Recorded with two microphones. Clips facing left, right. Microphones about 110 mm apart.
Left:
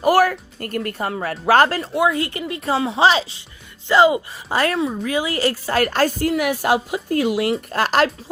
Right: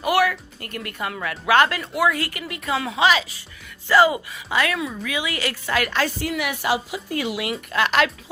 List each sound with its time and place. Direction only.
0.0 s a woman's voice: 40° left (ahead or behind); by 4.2 s 25° left (ahead or behind)
4.3 s a woman's voice: 40° left (ahead or behind)